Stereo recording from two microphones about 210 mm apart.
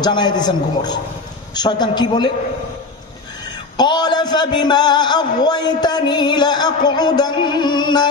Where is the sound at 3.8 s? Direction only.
20° left (ahead or behind).